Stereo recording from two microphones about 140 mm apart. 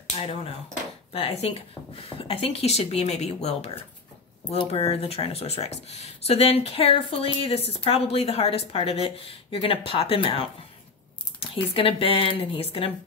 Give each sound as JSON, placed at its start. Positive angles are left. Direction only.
{"t": 0.1, "sound": "speech", "side_deg": 45}